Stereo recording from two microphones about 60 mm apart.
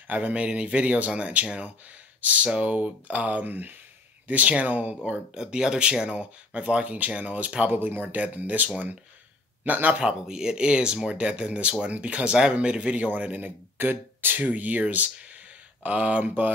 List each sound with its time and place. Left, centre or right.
0.1 s a man's voice: right
5.3 s a man's voice: centre
10.0 s a man's voice: centre